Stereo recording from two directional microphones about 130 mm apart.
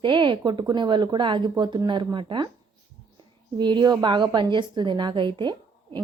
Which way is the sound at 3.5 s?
35° right (ahead or behind).